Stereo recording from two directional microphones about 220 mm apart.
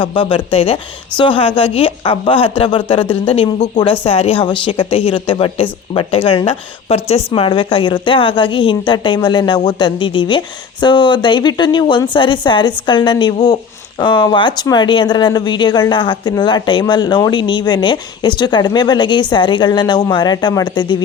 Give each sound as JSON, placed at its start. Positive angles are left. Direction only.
{"t": 0.0, "sound": "speech", "side_deg": 25}